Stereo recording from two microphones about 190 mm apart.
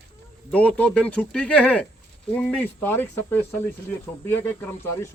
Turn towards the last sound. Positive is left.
turn(degrees=10)  # may be behind; listen again after turning